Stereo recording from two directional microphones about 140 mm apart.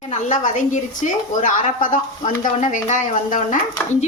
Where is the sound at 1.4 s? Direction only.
70° left (ahead or behind).